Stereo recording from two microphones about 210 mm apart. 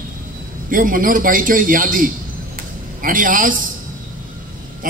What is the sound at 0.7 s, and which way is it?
A man's voice, 40° right (ahead or behind).